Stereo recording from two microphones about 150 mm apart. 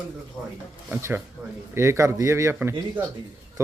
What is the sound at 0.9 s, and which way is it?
A man's voice, 15° right (ahead or behind).